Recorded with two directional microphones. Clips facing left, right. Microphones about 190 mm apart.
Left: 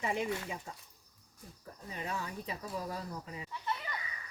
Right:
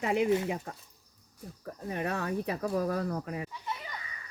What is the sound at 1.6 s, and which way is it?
Speech, 65° right (ahead or behind).